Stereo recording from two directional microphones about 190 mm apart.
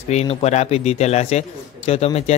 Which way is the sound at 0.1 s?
35° left (ahead or behind).